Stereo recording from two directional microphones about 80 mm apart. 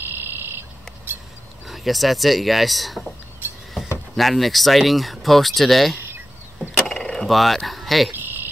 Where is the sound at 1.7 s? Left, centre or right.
Centre.